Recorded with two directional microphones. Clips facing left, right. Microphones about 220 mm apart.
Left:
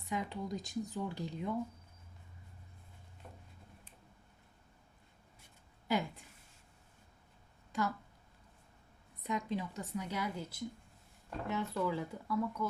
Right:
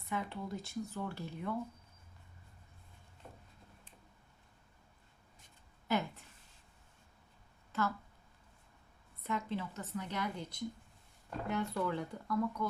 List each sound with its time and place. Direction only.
0.1 s speech: 15° left (ahead or behind)
5.9 s a sound: 10° left (ahead or behind)
7.7 s speech: 15° left (ahead or behind)
9.2 s speech: 15° left (ahead or behind)